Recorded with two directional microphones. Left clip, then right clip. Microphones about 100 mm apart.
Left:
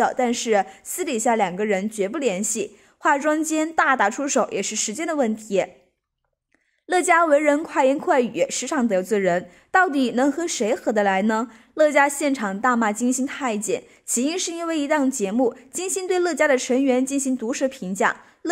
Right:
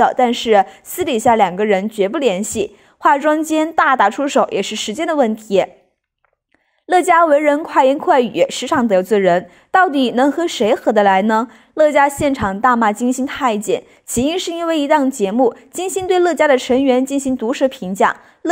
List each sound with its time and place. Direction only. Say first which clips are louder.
0.0 s a woman's voice: right 8 dB; 45° right (ahead or behind)
6.9 s a woman's voice: right 6 dB; 30° right (ahead or behind)